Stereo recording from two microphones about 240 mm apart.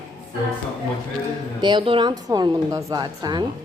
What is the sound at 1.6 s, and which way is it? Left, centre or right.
A woman's voice, centre.